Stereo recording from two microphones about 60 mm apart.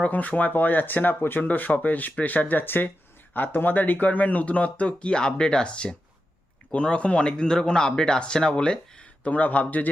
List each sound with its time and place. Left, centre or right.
0.0 s a man's voice: left